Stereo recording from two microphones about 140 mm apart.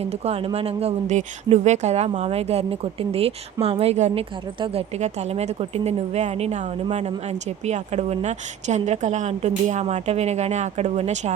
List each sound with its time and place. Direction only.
0.0 s speech: 50° right (ahead or behind)